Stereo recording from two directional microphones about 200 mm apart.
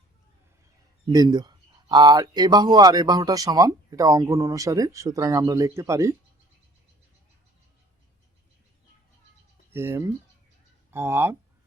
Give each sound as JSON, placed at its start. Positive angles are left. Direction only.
{"t": 1.0, "sound": "speech", "side_deg": -20}
{"t": 9.7, "sound": "speech", "side_deg": -10}